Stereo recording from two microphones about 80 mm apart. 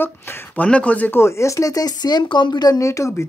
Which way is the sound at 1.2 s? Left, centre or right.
Left.